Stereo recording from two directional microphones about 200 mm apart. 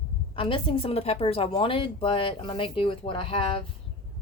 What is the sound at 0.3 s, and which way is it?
A woman's voice, 25° left (ahead or behind).